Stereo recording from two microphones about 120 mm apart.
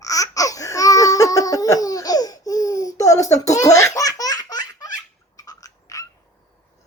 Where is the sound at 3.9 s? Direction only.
30° left (ahead or behind).